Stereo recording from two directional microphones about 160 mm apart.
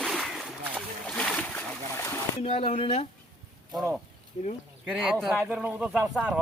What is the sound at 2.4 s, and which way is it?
Speech, 35° left (ahead or behind).